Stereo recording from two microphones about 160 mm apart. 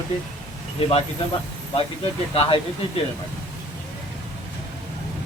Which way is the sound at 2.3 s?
35° left (ahead or behind).